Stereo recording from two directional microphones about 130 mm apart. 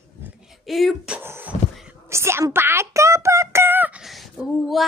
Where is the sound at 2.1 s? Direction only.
20° right (ahead or behind); by 4.8 s centre (ahead or behind).